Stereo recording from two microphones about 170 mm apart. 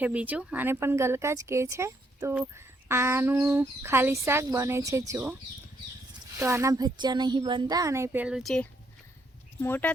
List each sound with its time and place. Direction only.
0.0 s speech: 10° right (ahead or behind)
6.3 s speech: 15° right (ahead or behind); by 8.6 s centre (ahead or behind)
9.6 s speech: 10° left (ahead or behind)